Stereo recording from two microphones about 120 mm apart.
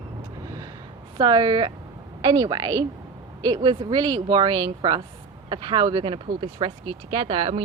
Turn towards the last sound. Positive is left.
turn(degrees=-45)  # may be behind; listen again after turning